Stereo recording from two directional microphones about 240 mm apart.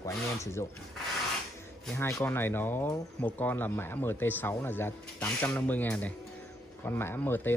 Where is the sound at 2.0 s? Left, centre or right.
Centre.